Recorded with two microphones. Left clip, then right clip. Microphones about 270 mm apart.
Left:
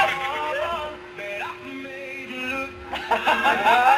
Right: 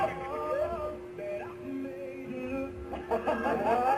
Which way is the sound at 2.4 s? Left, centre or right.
Centre.